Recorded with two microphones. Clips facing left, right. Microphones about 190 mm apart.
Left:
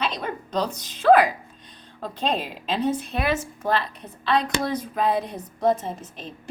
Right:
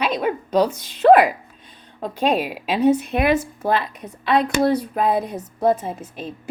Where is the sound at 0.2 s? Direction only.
10° right (ahead or behind).